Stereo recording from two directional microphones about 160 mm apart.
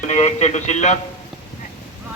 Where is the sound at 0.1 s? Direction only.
45° left (ahead or behind).